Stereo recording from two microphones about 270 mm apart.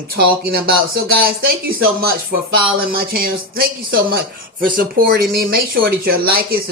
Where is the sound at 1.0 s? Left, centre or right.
Right.